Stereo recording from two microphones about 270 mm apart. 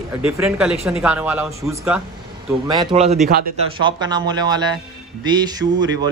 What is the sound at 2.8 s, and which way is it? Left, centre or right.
Speech, right.